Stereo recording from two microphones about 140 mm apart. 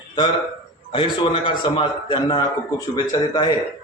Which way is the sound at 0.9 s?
40° left (ahead or behind).